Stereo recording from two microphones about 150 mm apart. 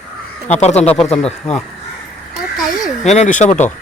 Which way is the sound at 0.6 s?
50° left (ahead or behind).